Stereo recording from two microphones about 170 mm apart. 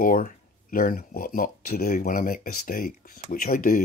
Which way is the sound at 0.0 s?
55° left (ahead or behind).